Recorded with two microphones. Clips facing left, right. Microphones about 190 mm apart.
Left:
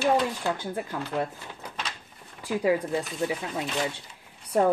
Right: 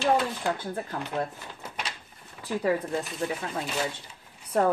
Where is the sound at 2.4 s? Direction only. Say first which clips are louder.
Left 2 dB; 10° left (ahead or behind).